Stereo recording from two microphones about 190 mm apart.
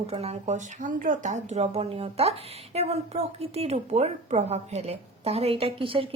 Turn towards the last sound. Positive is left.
turn(degrees=-30)  # may be behind; listen again after turning